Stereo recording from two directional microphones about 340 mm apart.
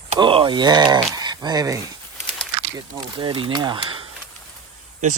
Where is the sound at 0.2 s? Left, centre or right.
Centre.